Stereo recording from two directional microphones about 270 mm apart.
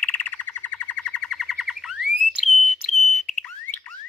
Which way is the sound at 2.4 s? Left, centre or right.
Centre.